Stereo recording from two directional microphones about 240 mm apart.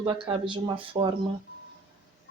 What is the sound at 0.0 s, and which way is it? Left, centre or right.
A woman's voice, right.